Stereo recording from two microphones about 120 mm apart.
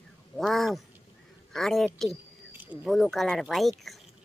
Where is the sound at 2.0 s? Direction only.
15° right (ahead or behind).